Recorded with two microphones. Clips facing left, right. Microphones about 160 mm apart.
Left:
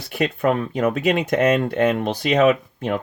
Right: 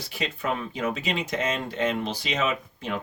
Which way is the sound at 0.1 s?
55° left (ahead or behind).